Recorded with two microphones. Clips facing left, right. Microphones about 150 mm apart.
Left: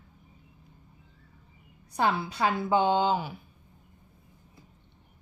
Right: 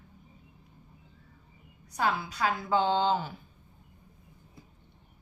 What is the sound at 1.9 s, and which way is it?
A woman's voice, 25° left (ahead or behind).